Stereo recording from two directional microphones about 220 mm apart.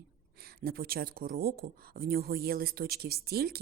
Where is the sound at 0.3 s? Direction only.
45° right (ahead or behind).